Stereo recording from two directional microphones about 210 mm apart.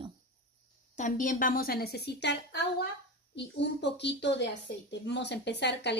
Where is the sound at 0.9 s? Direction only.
40° left (ahead or behind).